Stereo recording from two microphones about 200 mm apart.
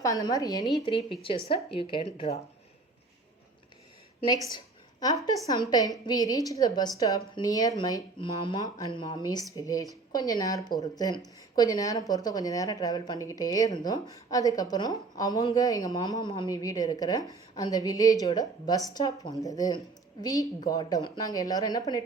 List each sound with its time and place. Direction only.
0.0 s a woman's voice: 15° left (ahead or behind)
4.5 s a sound: 20° left (ahead or behind)
5.7 s a woman's voice: 20° left (ahead or behind)